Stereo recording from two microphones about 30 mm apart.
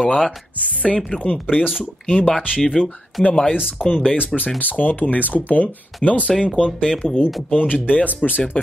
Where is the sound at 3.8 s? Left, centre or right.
Left.